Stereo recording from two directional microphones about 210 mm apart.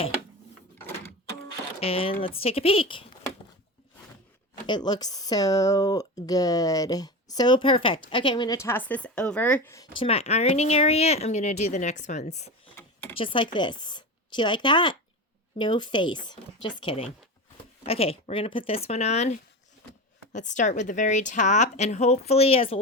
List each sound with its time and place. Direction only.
1.8 s speech: 25° left (ahead or behind)
4.6 s speech: 20° left (ahead or behind)